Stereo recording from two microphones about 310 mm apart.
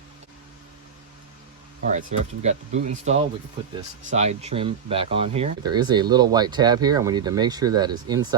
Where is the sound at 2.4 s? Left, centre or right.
Right.